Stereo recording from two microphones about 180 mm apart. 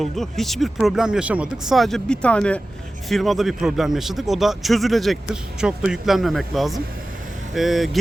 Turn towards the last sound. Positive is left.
turn(degrees=0)  # may be behind; listen again after turning